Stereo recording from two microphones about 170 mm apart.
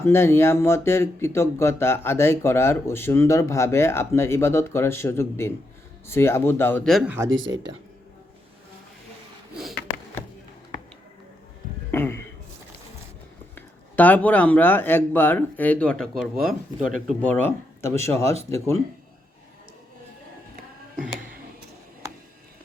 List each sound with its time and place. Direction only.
0.0 s speech: 15° left (ahead or behind)
11.9 s a sound: 15° left (ahead or behind)
13.6 s speech: 10° left (ahead or behind)
17.2 s speech: 10° left (ahead or behind)